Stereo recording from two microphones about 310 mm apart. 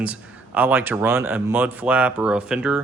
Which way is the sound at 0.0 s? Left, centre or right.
Centre.